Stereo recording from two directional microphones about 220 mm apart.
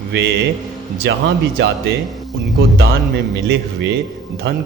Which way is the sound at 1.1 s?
55° right (ahead or behind).